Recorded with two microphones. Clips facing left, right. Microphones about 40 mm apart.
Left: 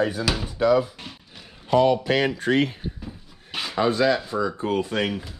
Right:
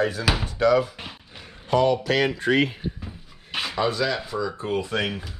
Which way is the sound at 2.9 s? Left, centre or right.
Centre.